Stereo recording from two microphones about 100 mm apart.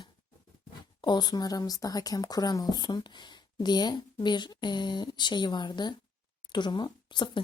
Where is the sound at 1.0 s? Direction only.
45° left (ahead or behind).